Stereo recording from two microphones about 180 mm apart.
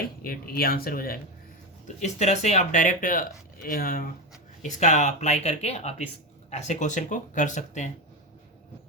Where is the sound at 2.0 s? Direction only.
40° left (ahead or behind).